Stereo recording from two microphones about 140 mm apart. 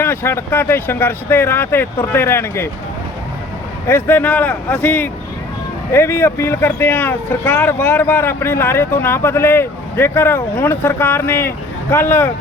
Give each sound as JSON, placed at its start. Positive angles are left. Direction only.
{"t": 0.0, "sound": "speech", "side_deg": 15}
{"t": 3.8, "sound": "speech", "side_deg": 15}